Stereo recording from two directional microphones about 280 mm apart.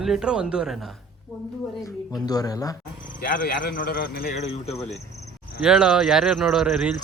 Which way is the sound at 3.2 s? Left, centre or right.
Left.